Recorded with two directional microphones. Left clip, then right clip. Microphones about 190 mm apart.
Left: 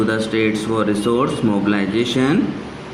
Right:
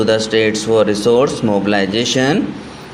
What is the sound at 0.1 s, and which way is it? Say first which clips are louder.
Speech: right 5 dB; 35° right (ahead or behind).